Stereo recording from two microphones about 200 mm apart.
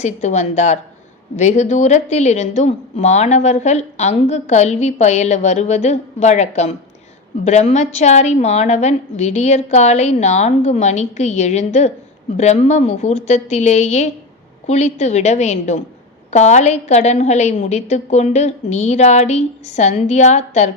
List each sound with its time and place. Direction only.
0.0 s a woman's voice: 35° left (ahead or behind)